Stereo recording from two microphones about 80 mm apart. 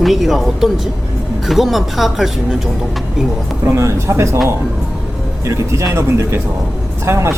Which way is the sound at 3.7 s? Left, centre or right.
Right.